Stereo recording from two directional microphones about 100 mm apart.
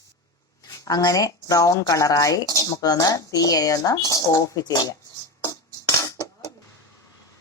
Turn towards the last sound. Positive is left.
turn(degrees=40)  # may be behind; listen again after turning